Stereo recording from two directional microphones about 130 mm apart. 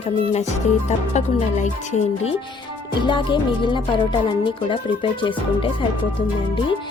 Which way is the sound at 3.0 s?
40° left (ahead or behind).